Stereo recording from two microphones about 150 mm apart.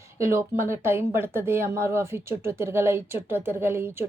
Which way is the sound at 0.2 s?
15° right (ahead or behind).